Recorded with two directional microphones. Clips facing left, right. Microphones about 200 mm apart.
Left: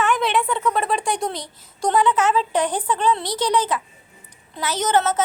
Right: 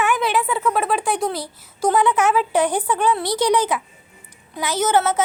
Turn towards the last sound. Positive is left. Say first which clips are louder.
# right 1 dB
turn(degrees=-10)  # may be behind; listen again after turning